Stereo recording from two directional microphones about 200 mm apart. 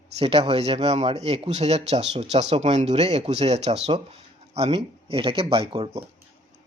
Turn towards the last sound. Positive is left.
turn(degrees=-30)  # may be behind; listen again after turning